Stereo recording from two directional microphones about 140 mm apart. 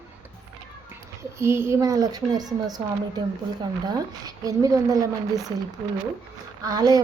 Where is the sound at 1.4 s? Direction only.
20° right (ahead or behind).